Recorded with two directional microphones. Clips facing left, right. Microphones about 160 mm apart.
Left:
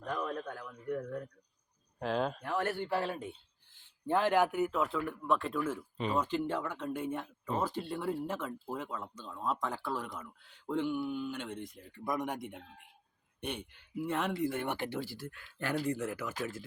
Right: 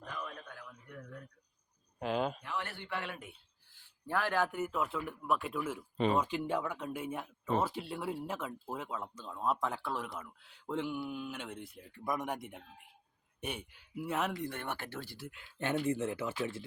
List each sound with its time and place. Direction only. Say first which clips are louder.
0.3 s a sound: left 9 dB; 45° left (ahead or behind)
2.0 s speech: left 1 dB; centre (ahead or behind)
2.4 s speech: left 7 dB; 45° left (ahead or behind)
3.8 s a sound: left 5 dB; 20° left (ahead or behind)
4.5 s speech: left 4 dB; centre (ahead or behind); by 15.1 s 15° left (ahead or behind)
15.3 s speech: right 4 dB; 20° right (ahead or behind)